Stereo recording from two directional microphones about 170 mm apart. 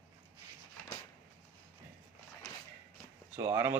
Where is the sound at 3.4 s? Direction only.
15° right (ahead or behind).